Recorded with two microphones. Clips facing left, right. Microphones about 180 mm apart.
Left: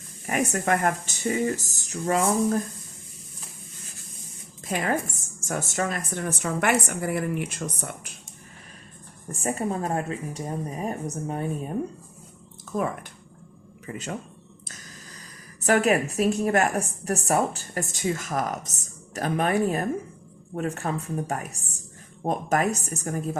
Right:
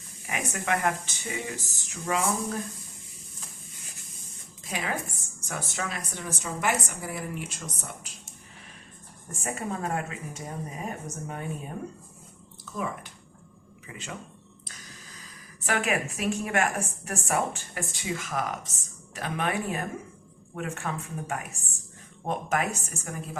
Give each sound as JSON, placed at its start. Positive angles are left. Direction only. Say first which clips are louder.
{"t": 0.3, "sound": "speech", "louder": "left 6 dB", "side_deg": 45}
{"t": 4.6, "sound": "speech", "louder": "left 6 dB", "side_deg": 50}
{"t": 9.3, "sound": "a woman's voice", "louder": "left 6 dB", "side_deg": 35}
{"t": 12.7, "sound": "speech", "louder": "left 6 dB", "side_deg": 50}
{"t": 15.6, "sound": "a woman's voice", "louder": "left 7 dB", "side_deg": 40}